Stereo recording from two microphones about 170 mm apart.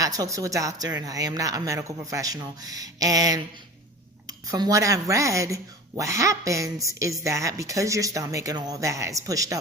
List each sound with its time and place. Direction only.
0.0 s a woman's voice: 20° right (ahead or behind)